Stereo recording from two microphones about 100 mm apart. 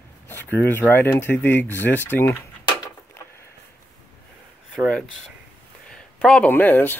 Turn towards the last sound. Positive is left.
turn(degrees=20)  # may be behind; listen again after turning